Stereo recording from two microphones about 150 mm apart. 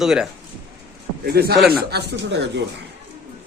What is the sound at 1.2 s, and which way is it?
Speech, 90° right.